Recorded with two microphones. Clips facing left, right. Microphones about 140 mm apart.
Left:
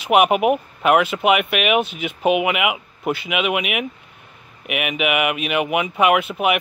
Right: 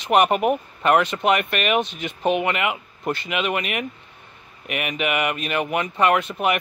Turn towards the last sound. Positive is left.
turn(degrees=5)  # may be behind; listen again after turning